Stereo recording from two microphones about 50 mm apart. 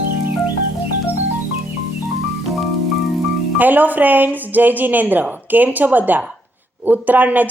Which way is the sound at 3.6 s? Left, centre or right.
Right.